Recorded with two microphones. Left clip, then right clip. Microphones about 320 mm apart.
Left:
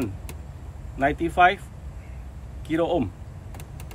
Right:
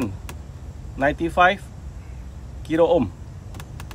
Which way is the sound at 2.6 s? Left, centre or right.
Right.